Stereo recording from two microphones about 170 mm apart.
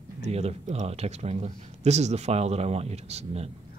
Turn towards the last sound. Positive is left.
turn(degrees=-40)  # may be behind; listen again after turning